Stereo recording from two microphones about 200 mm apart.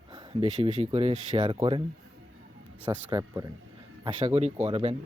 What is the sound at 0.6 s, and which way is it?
Speech, 30° right (ahead or behind).